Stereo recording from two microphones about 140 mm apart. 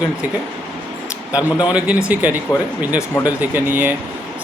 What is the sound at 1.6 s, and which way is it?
Speech, 10° right (ahead or behind).